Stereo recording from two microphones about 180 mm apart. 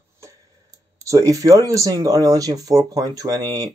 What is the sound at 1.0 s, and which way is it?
Speech, 20° right (ahead or behind).